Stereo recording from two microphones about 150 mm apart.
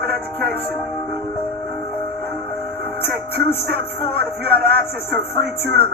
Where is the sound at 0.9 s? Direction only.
15° left (ahead or behind).